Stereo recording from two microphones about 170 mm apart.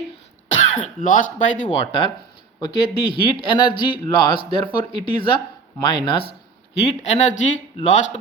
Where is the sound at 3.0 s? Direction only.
30° left (ahead or behind).